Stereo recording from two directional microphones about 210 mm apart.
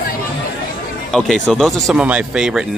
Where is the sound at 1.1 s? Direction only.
Centre (ahead or behind).